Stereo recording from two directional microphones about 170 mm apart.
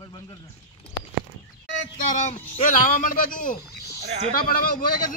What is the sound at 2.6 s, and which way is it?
A man's voice, 50° left (ahead or behind).